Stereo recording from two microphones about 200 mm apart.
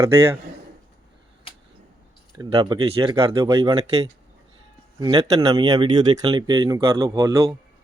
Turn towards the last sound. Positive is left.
turn(degrees=-15)  # may be behind; listen again after turning